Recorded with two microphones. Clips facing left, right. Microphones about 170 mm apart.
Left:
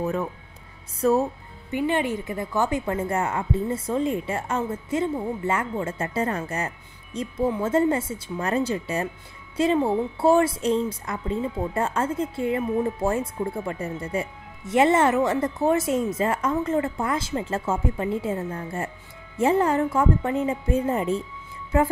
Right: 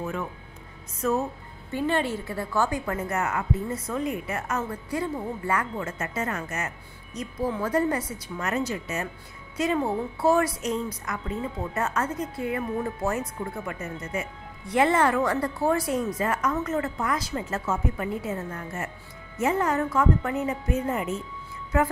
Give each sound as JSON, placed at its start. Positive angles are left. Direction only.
{"t": 0.0, "sound": "speech", "side_deg": 35}
{"t": 1.7, "sound": "speech", "side_deg": 15}